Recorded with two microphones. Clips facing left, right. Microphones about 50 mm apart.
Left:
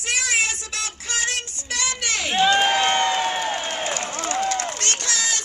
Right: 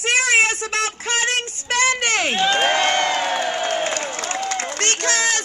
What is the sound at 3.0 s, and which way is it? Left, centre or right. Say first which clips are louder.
Crowd: right 1 dB; right.